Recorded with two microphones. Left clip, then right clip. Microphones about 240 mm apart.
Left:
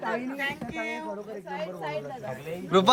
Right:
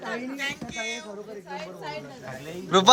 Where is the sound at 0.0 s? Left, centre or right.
Left.